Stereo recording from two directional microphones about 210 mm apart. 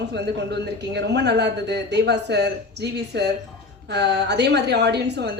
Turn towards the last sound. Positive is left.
turn(degrees=-50)  # may be behind; listen again after turning